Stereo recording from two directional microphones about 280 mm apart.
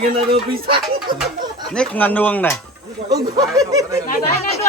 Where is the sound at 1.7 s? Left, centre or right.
Centre.